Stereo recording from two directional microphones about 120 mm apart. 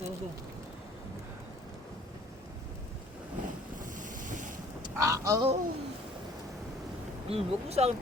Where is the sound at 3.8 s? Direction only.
90° right.